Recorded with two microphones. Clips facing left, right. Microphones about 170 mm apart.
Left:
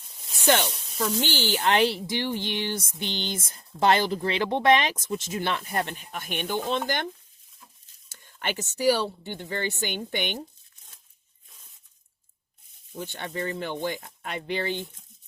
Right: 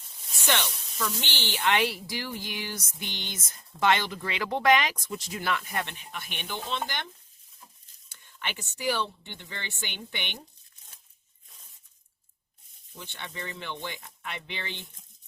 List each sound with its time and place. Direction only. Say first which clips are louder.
0.4 s speech: left 7 dB; 40° left (ahead or behind)
8.1 s speech: left 6 dB; 45° left (ahead or behind)
13.0 s speech: left 8 dB; 40° left (ahead or behind)